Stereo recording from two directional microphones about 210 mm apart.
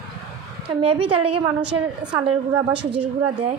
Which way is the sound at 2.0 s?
20° right (ahead or behind).